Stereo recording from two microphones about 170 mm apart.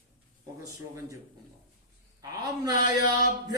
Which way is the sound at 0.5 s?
20° right (ahead or behind).